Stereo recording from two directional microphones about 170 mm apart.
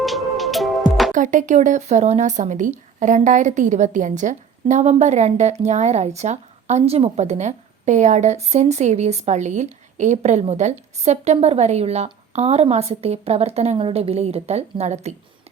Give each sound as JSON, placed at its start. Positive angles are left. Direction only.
{"t": 0.0, "sound": "music", "side_deg": 0}
{"t": 1.1, "sound": "a woman's voice", "side_deg": -50}